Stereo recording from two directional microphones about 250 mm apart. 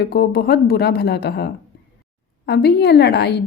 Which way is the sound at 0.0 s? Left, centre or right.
Left.